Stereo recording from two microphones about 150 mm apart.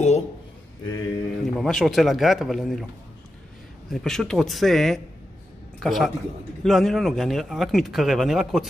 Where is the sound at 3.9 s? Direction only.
Centre (ahead or behind).